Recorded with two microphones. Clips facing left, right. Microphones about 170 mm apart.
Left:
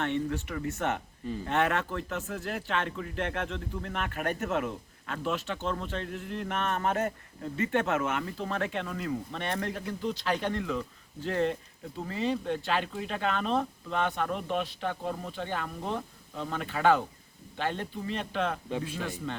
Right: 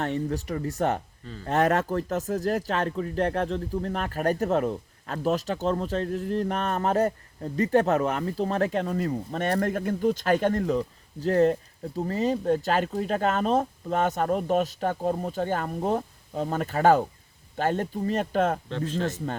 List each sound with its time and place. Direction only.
0.0 s speech: 40° right (ahead or behind)
18.7 s a man's voice: 10° left (ahead or behind)
19.0 s speech: 45° right (ahead or behind)